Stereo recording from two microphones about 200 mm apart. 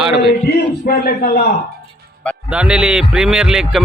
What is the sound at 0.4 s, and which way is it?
A man's voice, 50° left (ahead or behind).